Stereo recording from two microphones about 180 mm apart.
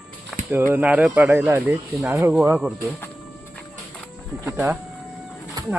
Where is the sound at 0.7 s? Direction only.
10° right (ahead or behind).